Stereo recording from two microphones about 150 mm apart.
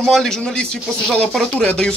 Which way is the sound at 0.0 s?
Centre (ahead or behind).